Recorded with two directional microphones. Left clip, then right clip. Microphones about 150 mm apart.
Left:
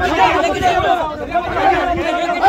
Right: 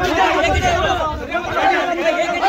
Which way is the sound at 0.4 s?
55° left (ahead or behind).